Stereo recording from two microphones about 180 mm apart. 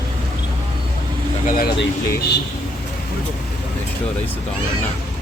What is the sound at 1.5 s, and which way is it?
Speech, 55° left (ahead or behind).